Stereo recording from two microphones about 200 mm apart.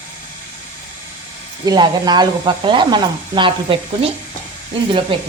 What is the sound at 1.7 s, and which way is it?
Speech, 20° right (ahead or behind).